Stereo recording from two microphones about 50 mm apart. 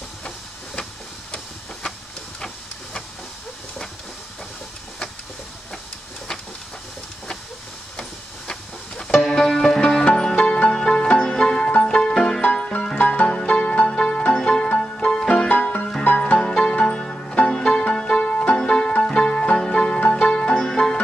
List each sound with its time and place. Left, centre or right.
1.3 s printer: centre
8.0 s music: centre
10.3 s music: left
12.9 s music: left
16.3 s music: centre